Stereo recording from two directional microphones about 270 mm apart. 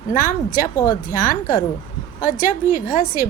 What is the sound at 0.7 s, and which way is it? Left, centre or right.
Speech, centre.